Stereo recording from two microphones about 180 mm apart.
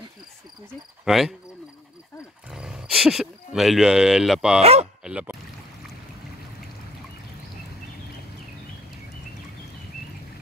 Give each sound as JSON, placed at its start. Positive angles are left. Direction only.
{"t": 1.0, "sound": "speech", "side_deg": 0}
{"t": 2.5, "sound": "speech", "side_deg": -5}
{"t": 4.6, "sound": "speech", "side_deg": -35}
{"t": 5.0, "sound": "a sound", "side_deg": -5}